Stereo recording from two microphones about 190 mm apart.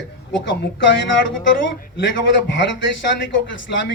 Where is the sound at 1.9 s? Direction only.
70° left (ahead or behind).